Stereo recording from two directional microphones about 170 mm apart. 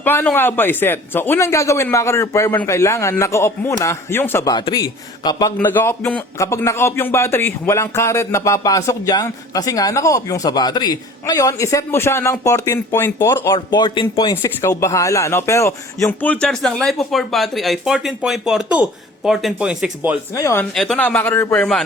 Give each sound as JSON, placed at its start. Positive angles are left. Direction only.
{"t": 0.0, "sound": "a man's voice", "side_deg": 10}
{"t": 4.5, "sound": "a man's voice", "side_deg": 25}
{"t": 5.5, "sound": "a man's voice", "side_deg": 10}
{"t": 13.7, "sound": "a man's voice", "side_deg": 25}
{"t": 14.4, "sound": "speech", "side_deg": 15}
{"t": 20.3, "sound": "a man's voice", "side_deg": 15}
{"t": 20.7, "sound": "a man's voice", "side_deg": 5}